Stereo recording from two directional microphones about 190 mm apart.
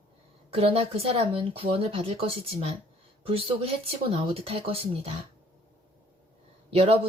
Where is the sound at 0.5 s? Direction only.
30° right (ahead or behind).